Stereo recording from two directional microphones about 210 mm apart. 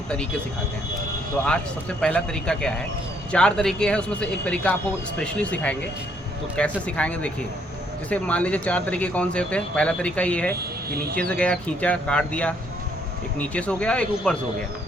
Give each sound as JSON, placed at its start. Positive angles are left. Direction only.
{"t": 2.0, "sound": "speech", "side_deg": 5}
{"t": 10.5, "sound": "speech", "side_deg": -45}
{"t": 11.2, "sound": "speech", "side_deg": 5}